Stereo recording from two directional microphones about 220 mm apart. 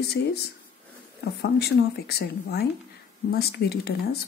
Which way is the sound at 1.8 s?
45° left (ahead or behind).